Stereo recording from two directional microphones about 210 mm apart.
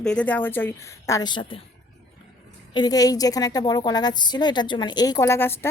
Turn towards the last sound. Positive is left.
turn(degrees=10)  # may be behind; listen again after turning